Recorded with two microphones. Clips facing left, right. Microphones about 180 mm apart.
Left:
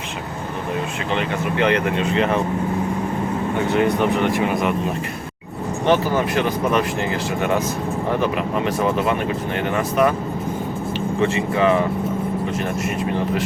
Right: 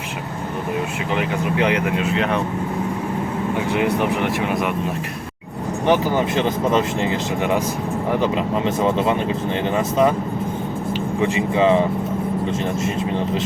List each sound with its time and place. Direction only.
1.1 s speech: 10° right (ahead or behind)
3.7 s speech: 10° right (ahead or behind)
5.8 s speech: 15° right (ahead or behind)
11.2 s speech: 15° right (ahead or behind)